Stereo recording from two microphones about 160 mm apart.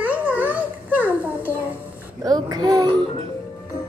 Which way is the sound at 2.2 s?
25° right (ahead or behind).